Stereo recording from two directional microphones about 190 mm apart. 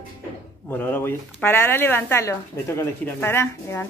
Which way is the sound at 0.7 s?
10° left (ahead or behind).